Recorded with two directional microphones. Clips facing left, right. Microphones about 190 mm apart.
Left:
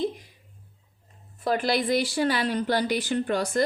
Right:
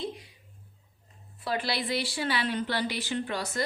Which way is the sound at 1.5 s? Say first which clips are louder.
Left 7 dB; 45° left (ahead or behind).